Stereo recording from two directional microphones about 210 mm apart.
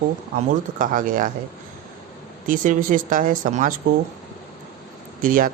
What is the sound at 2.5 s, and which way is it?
Speech, 40° right (ahead or behind).